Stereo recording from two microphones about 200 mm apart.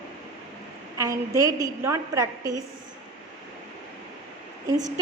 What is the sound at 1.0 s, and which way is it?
A woman's voice, 15° right (ahead or behind).